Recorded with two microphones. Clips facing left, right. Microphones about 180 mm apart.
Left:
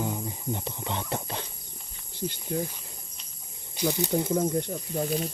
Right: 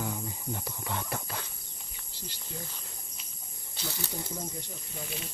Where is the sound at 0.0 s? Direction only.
20° left (ahead or behind).